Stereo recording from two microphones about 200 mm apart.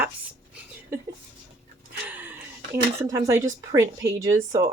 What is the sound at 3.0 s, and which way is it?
Speech, 15° right (ahead or behind).